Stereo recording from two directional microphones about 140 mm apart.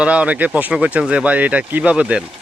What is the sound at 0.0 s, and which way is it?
Speech, 10° right (ahead or behind).